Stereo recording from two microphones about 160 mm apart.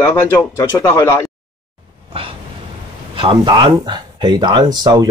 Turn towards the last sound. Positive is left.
turn(degrees=-25)  # may be behind; listen again after turning